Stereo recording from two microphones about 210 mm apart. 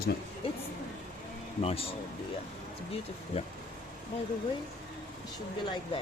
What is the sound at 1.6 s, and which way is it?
Speech, 25° left (ahead or behind).